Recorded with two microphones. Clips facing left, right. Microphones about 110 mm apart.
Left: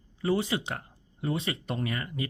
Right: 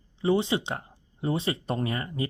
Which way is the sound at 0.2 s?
25° right (ahead or behind).